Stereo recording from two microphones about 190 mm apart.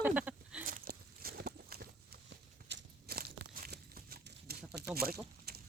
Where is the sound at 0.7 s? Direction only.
50° right (ahead or behind).